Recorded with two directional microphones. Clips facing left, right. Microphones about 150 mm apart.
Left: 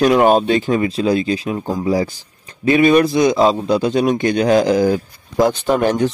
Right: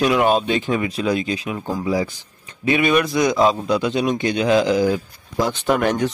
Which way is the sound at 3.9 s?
50° left (ahead or behind).